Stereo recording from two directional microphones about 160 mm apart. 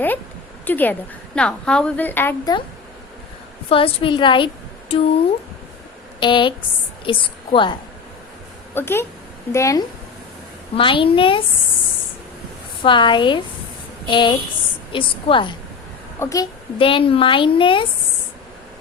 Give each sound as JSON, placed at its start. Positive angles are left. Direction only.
{"t": 0.6, "sound": "a woman's voice", "side_deg": 10}
{"t": 3.7, "sound": "a woman's voice", "side_deg": 35}
{"t": 6.1, "sound": "a woman's voice", "side_deg": 30}
{"t": 8.7, "sound": "a woman's voice", "side_deg": 15}
{"t": 10.8, "sound": "a woman's voice", "side_deg": 35}
{"t": 12.8, "sound": "a woman's voice", "side_deg": 30}
{"t": 16.2, "sound": "a woman's voice", "side_deg": 20}
{"t": 16.7, "sound": "a woman's voice", "side_deg": 35}